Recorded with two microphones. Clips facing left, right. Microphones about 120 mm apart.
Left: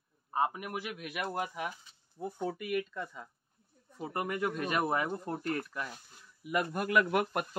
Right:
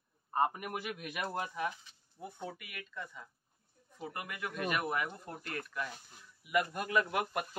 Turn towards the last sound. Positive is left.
turn(degrees=50)  # may be behind; listen again after turning